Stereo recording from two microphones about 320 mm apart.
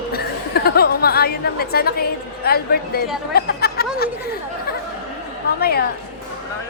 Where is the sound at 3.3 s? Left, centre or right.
Left.